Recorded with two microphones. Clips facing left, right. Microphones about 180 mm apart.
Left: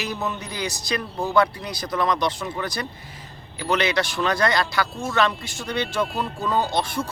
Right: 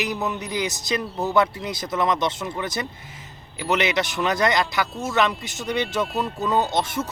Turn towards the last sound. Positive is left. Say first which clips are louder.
# even
turn(degrees=-20)  # may be behind; listen again after turning